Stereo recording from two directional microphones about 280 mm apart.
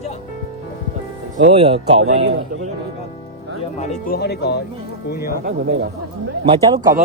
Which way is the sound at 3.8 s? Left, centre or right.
Left.